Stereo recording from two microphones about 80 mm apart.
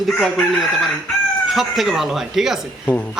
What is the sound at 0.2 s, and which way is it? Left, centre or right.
Speech, centre.